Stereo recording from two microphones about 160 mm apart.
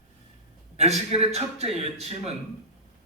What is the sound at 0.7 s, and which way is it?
A man's voice, 40° right (ahead or behind).